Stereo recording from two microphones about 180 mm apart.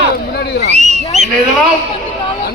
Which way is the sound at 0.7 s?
40° right (ahead or behind).